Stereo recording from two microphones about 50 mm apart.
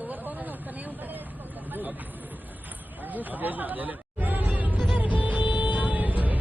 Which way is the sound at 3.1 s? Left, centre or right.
Right.